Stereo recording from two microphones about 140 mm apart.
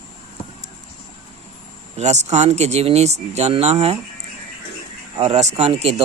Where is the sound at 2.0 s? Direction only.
55° right (ahead or behind).